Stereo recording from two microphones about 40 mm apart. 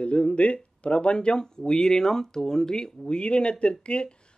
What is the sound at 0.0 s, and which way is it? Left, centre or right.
Speech, left.